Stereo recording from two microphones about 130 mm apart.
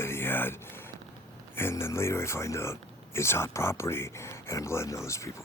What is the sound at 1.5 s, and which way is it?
Speech, 20° left (ahead or behind).